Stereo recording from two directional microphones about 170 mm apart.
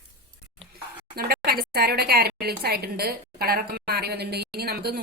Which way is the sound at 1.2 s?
65° right (ahead or behind).